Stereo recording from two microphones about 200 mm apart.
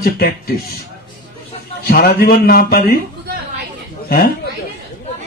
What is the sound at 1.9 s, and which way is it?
A man's voice, 50° left (ahead or behind).